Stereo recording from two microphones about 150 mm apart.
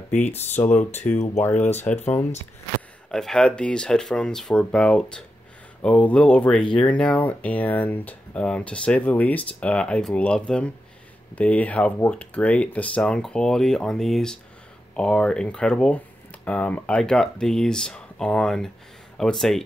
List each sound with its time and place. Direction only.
0.2 s speech: 50° left (ahead or behind)
0.7 s speech: 10° left (ahead or behind)
1.0 s speech: 50° left (ahead or behind)
1.9 s speech: 10° left (ahead or behind)
3.1 s speech: 5° left (ahead or behind)